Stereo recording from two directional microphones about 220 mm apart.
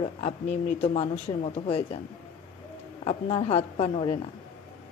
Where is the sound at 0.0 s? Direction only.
30° left (ahead or behind).